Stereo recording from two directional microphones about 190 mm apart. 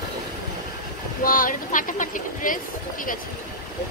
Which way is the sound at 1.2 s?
45° left (ahead or behind).